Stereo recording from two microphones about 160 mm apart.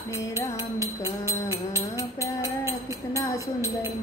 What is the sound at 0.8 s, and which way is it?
Music, 20° right (ahead or behind).